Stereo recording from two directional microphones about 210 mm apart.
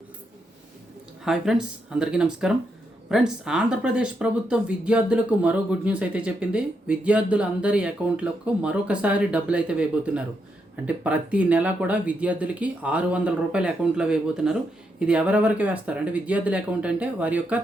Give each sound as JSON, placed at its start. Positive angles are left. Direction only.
{"t": 1.2, "sound": "speech", "side_deg": 0}